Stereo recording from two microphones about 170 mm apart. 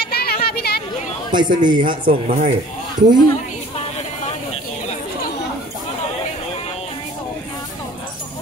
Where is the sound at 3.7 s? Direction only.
35° left (ahead or behind).